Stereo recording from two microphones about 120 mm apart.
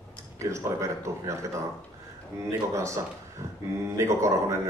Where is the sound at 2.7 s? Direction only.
25° right (ahead or behind).